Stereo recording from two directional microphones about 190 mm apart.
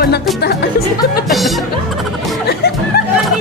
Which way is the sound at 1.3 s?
Centre (ahead or behind).